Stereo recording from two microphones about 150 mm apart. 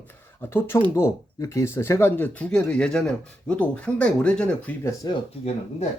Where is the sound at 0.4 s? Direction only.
15° left (ahead or behind).